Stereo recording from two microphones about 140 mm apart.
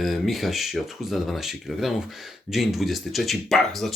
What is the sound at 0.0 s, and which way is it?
Speech, centre (ahead or behind).